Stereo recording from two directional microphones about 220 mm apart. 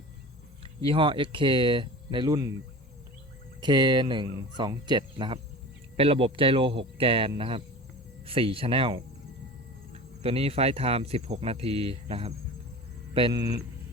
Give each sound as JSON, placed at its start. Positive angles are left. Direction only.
{"t": 0.9, "sound": "cricket", "side_deg": -20}
{"t": 3.6, "sound": "cricket", "side_deg": -20}
{"t": 10.2, "sound": "cricket", "side_deg": -25}